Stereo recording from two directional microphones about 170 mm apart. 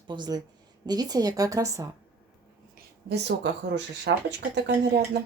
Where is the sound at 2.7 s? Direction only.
75° right (ahead or behind).